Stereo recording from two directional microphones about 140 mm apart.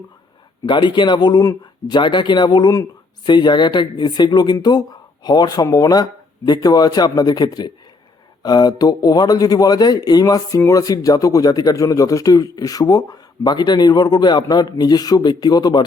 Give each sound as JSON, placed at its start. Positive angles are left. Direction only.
{"t": 0.6, "sound": "speech", "side_deg": 35}